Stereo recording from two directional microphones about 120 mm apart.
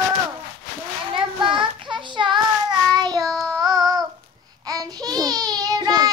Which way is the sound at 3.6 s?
30° right (ahead or behind).